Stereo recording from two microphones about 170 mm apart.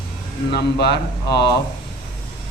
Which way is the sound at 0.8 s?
75° left (ahead or behind).